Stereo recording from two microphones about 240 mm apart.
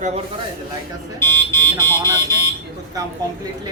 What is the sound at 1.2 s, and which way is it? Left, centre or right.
Speech, centre.